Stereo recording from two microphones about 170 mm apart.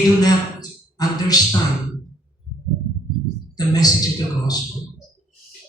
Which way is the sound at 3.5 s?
20° left (ahead or behind).